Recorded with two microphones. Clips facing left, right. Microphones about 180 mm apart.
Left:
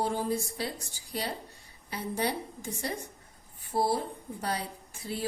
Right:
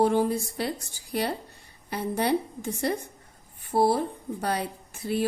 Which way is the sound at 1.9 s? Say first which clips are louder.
Right 6 dB; 60° right (ahead or behind).